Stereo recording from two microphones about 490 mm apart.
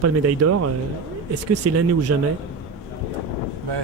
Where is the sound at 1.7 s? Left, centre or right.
Right.